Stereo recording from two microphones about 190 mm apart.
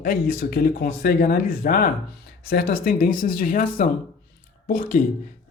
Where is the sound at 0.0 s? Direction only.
50° left (ahead or behind).